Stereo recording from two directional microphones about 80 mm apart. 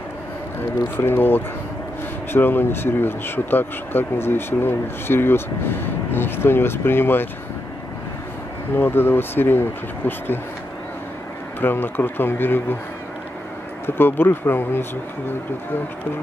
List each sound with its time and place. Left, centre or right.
0.6 s speech: left
8.7 s speech: left
11.6 s speech: left
13.8 s speech: left